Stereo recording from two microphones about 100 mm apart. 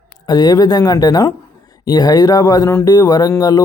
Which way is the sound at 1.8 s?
45° left (ahead or behind).